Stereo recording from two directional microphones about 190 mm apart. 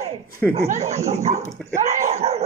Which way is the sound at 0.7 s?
35° right (ahead or behind).